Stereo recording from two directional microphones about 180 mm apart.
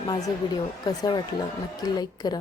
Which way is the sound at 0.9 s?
20° left (ahead or behind).